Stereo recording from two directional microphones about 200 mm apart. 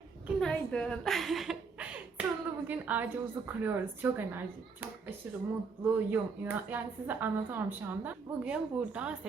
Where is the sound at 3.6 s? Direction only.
10° right (ahead or behind).